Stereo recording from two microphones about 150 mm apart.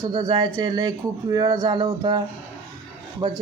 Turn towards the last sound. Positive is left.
turn(degrees=-30)  # may be behind; listen again after turning